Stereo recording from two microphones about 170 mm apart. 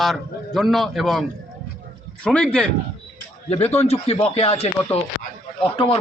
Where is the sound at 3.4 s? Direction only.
35° left (ahead or behind).